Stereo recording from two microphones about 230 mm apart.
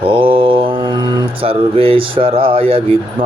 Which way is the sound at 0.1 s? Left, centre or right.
Right.